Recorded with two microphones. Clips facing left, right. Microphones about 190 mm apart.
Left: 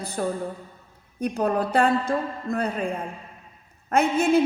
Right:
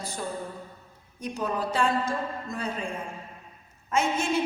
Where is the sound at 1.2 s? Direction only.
55° left (ahead or behind).